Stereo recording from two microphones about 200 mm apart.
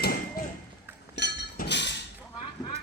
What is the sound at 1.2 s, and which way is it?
Chink, 55° left (ahead or behind).